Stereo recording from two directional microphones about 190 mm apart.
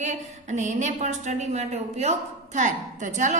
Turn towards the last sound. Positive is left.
turn(degrees=-40)  # may be behind; listen again after turning